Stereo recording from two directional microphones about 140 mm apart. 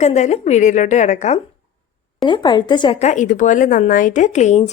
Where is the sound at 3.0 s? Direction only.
60° left (ahead or behind).